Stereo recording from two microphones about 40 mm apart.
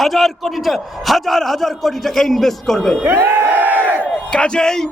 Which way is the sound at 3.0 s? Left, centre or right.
Right.